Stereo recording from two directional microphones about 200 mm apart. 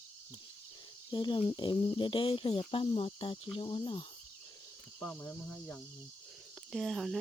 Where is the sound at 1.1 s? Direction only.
25° left (ahead or behind).